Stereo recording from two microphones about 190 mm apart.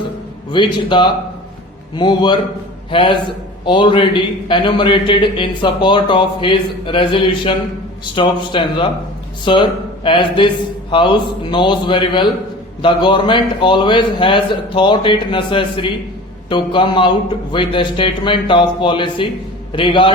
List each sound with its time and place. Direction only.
0.5 s a man's voice: 25° left (ahead or behind)